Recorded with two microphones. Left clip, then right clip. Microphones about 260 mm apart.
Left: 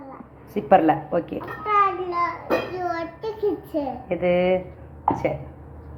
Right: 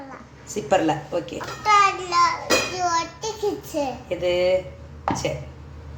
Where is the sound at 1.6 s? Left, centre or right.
Right.